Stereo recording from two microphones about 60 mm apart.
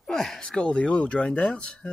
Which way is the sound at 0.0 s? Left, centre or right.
Centre.